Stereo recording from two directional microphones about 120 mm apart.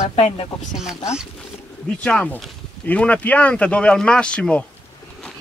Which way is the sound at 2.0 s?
5° left (ahead or behind).